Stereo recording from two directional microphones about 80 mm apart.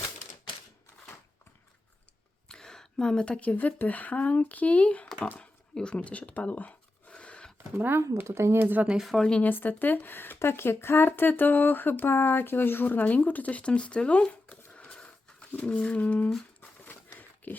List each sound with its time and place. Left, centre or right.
2.5 s speech: centre
5.4 s a sound: centre
7.8 s speech: right
8.6 s speech: right
8.9 s speech: centre
9.3 s speech: left